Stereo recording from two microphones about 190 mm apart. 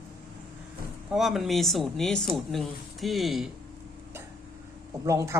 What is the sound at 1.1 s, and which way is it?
Speech, centre (ahead or behind).